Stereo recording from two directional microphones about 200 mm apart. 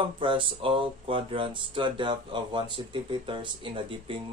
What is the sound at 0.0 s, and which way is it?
Speech, 25° right (ahead or behind).